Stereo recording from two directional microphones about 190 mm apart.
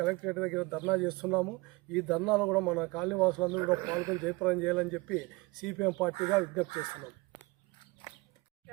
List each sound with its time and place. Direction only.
0.0 s speech: centre (ahead or behind)
3.6 s speech: 15° right (ahead or behind)
4.3 s speech: centre (ahead or behind)